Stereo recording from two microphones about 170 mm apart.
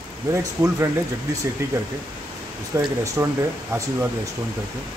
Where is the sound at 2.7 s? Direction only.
15° right (ahead or behind).